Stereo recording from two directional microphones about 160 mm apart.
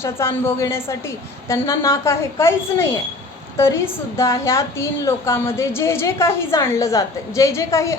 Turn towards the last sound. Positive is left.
turn(degrees=15)  # may be behind; listen again after turning